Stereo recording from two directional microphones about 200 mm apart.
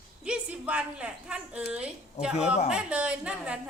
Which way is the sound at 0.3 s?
5° right (ahead or behind).